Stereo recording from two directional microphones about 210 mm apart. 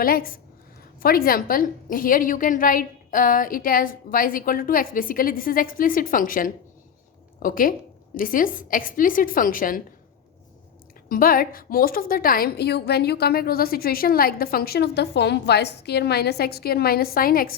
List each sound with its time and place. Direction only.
0.0 s a woman's voice: 45° left (ahead or behind)
11.1 s a woman's voice: 45° left (ahead or behind)